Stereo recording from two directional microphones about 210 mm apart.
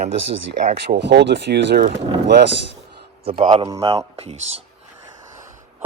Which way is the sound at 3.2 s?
30° right (ahead or behind).